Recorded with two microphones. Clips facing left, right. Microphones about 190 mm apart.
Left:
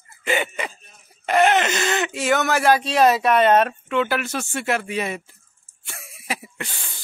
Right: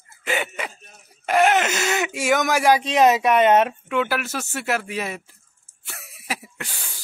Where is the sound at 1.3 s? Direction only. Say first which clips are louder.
Left 1 dB; 5° right (ahead or behind).